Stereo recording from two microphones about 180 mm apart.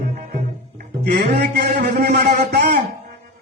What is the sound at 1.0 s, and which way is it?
A man's voice, 65° right (ahead or behind).